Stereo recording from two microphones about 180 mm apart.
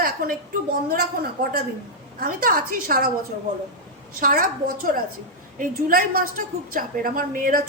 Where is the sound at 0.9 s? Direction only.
60° right (ahead or behind).